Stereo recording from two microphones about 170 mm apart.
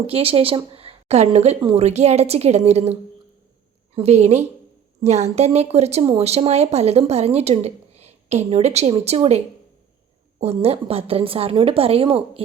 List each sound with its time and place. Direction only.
0.1 s speech: 35° right (ahead or behind)
10.4 s speech: 35° right (ahead or behind)